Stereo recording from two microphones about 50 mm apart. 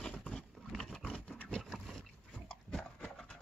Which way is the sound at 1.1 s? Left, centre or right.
Left.